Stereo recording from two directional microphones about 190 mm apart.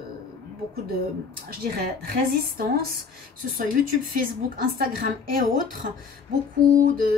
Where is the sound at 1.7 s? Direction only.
55° right (ahead or behind).